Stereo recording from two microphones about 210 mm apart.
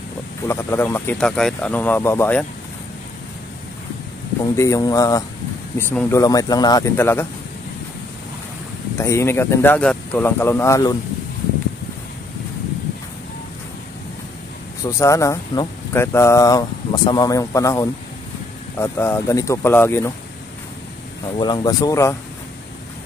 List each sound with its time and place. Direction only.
0.5 s speech: 10° left (ahead or behind)
4.6 s speech: 15° left (ahead or behind)
8.9 s speech: 10° left (ahead or behind)
14.9 s speech: 15° left (ahead or behind)
21.4 s speech: 20° left (ahead or behind)